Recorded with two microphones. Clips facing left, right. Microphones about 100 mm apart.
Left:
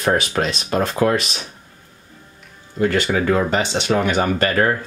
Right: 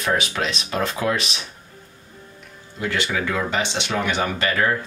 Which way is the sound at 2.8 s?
45° left (ahead or behind).